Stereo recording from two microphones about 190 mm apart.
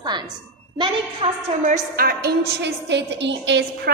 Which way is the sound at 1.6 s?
45° right (ahead or behind).